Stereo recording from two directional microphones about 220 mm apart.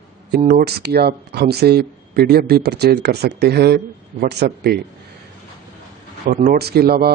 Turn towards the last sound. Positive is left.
turn(degrees=-45)  # may be behind; listen again after turning